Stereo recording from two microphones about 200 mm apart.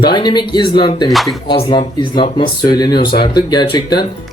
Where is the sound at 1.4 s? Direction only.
25° left (ahead or behind).